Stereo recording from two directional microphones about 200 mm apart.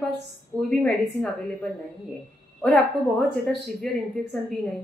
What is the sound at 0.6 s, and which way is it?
A woman's voice, 5° left (ahead or behind).